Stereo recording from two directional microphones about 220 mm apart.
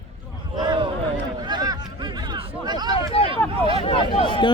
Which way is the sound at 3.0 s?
25° left (ahead or behind).